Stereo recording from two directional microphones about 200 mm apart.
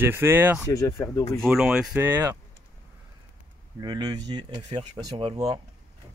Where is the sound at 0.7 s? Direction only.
15° left (ahead or behind).